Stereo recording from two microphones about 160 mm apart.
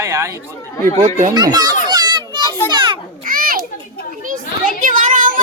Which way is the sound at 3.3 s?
60° right (ahead or behind).